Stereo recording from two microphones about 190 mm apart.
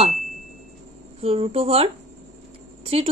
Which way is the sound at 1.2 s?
30° right (ahead or behind).